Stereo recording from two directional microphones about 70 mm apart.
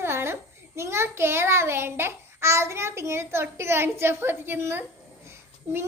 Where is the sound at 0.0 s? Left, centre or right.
Right.